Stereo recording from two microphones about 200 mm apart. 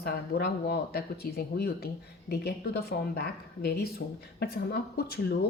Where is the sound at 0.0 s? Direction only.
50° left (ahead or behind).